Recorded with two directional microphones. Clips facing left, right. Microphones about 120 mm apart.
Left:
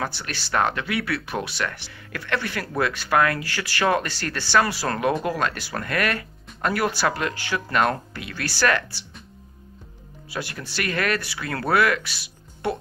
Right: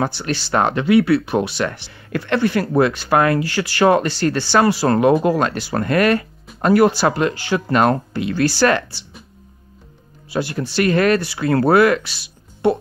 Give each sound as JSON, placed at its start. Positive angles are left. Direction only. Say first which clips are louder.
{"t": 0.0, "sound": "speech", "louder": "right 8 dB", "side_deg": -25}
{"t": 10.3, "sound": "speech", "louder": "right 10 dB", "side_deg": -25}